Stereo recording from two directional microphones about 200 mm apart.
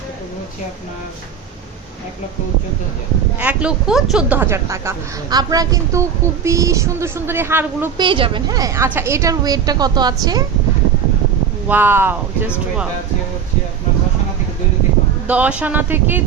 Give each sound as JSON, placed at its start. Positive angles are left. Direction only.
{"t": 3.3, "sound": "speech", "side_deg": -5}
{"t": 7.9, "sound": "a woman's voice", "side_deg": -25}
{"t": 11.7, "sound": "speech", "side_deg": -10}
{"t": 15.3, "sound": "speech", "side_deg": -5}